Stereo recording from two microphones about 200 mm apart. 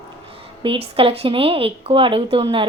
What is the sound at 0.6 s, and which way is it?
Speech, 25° right (ahead or behind).